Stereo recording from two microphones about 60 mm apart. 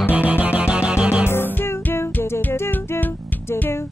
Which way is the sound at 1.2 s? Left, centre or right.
Left.